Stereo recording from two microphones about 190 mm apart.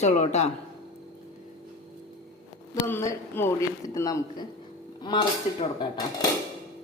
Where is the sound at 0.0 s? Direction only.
35° left (ahead or behind).